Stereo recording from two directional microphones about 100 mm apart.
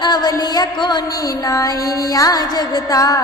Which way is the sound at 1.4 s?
35° left (ahead or behind).